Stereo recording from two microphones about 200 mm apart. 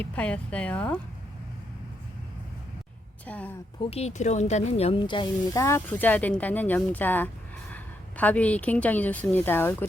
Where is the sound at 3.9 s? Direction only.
35° left (ahead or behind).